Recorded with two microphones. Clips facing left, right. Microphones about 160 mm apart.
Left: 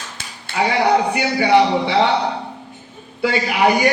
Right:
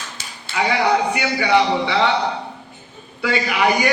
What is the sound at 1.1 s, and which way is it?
Speech, 45° left (ahead or behind).